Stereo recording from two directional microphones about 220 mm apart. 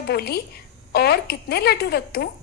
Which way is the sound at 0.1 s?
45° left (ahead or behind).